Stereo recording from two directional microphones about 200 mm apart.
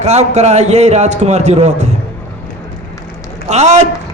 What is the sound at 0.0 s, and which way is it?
A man's voice, 35° right (ahead or behind).